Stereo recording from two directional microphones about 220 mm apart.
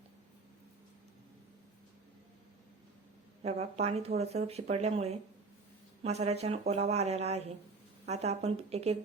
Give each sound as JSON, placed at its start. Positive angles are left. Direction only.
{"t": 3.4, "sound": "speech", "side_deg": -30}